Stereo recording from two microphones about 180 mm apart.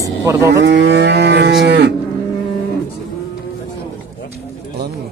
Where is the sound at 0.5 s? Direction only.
70° right (ahead or behind).